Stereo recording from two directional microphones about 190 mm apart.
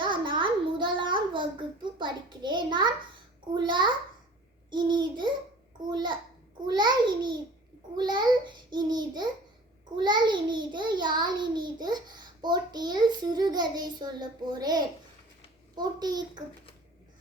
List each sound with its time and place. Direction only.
0.0 s child singing: 25° right (ahead or behind)
3.5 s a child's voice: 25° right (ahead or behind)